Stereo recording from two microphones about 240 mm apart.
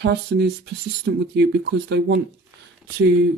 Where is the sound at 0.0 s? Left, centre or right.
Right.